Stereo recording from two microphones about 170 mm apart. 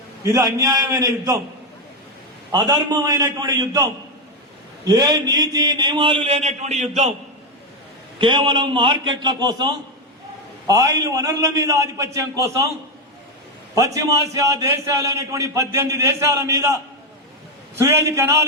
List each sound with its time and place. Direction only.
0.2 s a man's voice: 20° right (ahead or behind)
2.5 s a man's voice: 20° right (ahead or behind)
4.9 s a man's voice: 20° right (ahead or behind); by 7.1 s 45° right (ahead or behind)
8.2 s a man's voice: 30° right (ahead or behind)
13.7 s a man's voice: 20° right (ahead or behind)
17.7 s a man's voice: 15° right (ahead or behind)